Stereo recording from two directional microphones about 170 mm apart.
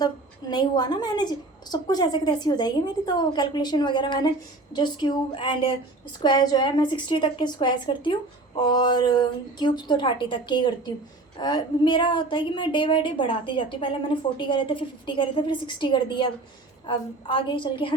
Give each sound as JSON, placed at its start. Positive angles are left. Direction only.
{"t": 0.0, "sound": "a woman's voice", "side_deg": 25}